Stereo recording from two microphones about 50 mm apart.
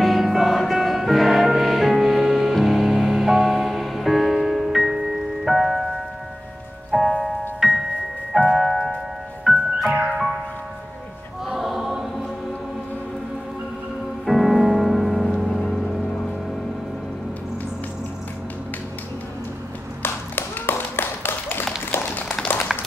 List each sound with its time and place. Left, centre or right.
0.0 s music: centre
11.4 s choir: centre
14.2 s music: centre
20.0 s clapping: left
21.9 s a sound: left
22.7 s a sound: centre